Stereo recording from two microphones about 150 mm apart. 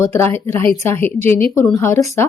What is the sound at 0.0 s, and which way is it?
Speech, 15° left (ahead or behind).